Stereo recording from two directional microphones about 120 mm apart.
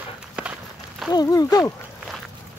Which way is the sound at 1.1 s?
30° left (ahead or behind).